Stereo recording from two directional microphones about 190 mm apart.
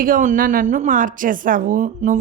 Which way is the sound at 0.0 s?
45° right (ahead or behind).